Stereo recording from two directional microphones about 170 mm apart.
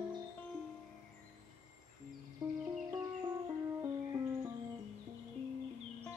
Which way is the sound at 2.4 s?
20° right (ahead or behind).